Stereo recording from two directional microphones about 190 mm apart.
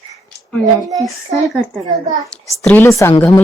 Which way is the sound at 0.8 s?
20° right (ahead or behind).